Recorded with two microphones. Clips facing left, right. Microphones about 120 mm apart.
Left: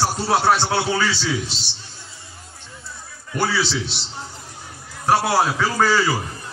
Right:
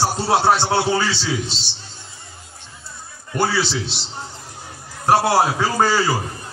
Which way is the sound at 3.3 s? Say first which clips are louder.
Right 2 dB; 30° right (ahead or behind).